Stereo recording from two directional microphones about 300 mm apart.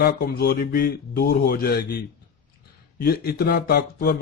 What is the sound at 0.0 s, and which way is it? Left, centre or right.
Speech, left.